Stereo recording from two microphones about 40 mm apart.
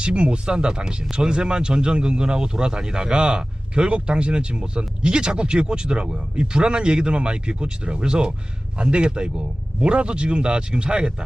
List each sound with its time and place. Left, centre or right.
0.0 s speech: right